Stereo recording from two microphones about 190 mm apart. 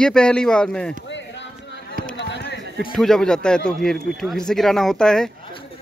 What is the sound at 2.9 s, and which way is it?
Speech, centre (ahead or behind).